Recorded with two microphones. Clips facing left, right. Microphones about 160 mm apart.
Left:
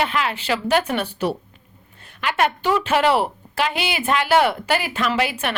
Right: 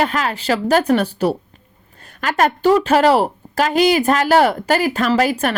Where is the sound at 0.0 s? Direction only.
40° right (ahead or behind).